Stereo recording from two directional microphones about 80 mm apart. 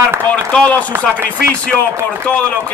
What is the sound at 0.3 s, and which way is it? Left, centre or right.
Speech, centre.